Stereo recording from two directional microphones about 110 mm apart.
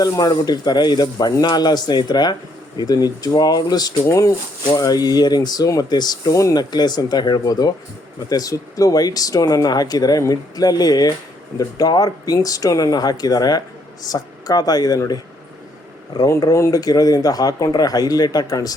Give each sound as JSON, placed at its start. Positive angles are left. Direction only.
{"t": 0.0, "sound": "speech", "side_deg": 35}